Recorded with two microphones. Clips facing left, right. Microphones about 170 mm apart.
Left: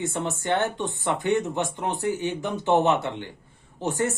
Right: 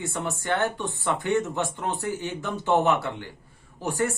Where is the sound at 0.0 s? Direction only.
20° left (ahead or behind).